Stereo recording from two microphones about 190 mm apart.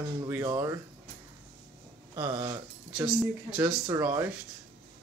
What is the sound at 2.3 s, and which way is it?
Speech, 30° right (ahead or behind).